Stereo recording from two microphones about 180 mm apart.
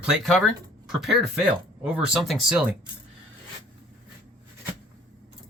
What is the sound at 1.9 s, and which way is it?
Speech, 5° right (ahead or behind).